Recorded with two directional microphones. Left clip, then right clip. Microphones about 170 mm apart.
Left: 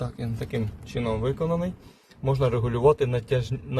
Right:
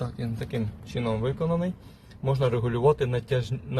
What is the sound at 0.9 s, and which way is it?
A man's voice, centre (ahead or behind).